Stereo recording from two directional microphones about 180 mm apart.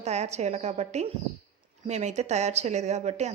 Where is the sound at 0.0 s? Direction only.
40° right (ahead or behind).